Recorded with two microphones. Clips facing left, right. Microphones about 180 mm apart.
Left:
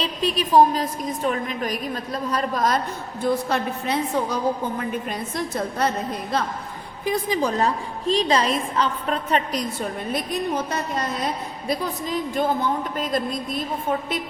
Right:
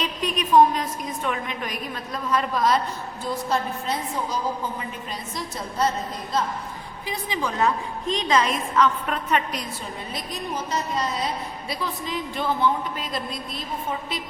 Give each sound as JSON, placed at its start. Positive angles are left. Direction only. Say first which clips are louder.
{"t": 0.0, "sound": "a woman's voice", "louder": "left 3 dB", "side_deg": 30}
{"t": 3.2, "sound": "a woman's voice", "louder": "left 4 dB", "side_deg": 65}
{"t": 5.4, "sound": "a woman's voice", "louder": "left 1 dB", "side_deg": 60}
{"t": 7.0, "sound": "a woman's voice", "louder": "left 6 dB", "side_deg": 45}
{"t": 9.8, "sound": "a woman's voice", "louder": "left 7 dB", "side_deg": 55}